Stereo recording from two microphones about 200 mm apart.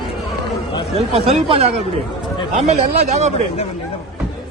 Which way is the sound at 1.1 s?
30° right (ahead or behind).